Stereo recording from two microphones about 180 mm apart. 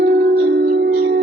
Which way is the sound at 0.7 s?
60° right (ahead or behind).